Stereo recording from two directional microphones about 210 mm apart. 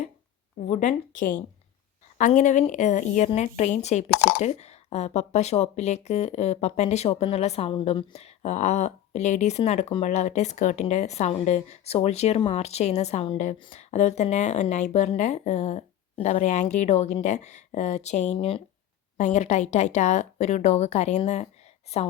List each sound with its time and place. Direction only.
0.7 s a woman's voice: 35° left (ahead or behind)